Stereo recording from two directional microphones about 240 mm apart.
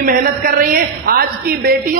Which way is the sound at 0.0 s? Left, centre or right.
Right.